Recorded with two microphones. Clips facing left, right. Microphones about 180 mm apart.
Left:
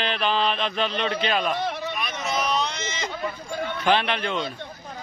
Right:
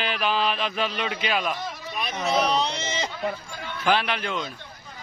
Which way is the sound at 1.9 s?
35° right (ahead or behind).